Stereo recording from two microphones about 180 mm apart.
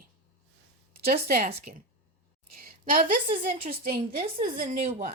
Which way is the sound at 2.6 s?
50° right (ahead or behind).